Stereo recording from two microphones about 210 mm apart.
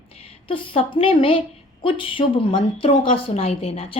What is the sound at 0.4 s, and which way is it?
A woman's voice, 25° left (ahead or behind).